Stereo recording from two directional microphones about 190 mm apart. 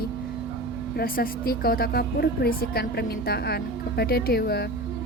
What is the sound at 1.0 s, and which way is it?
A woman's voice, 50° left (ahead or behind).